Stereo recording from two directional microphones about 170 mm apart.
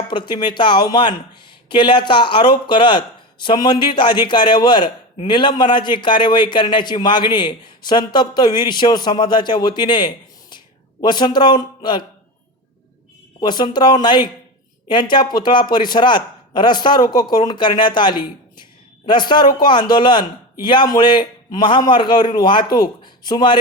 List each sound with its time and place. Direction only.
0.1 s a man's voice: 25° left (ahead or behind)
13.4 s a man's voice: 25° left (ahead or behind)